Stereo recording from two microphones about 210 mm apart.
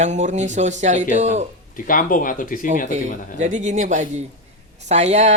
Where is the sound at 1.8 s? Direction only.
40° left (ahead or behind).